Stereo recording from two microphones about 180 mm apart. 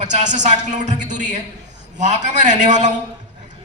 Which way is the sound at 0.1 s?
40° right (ahead or behind).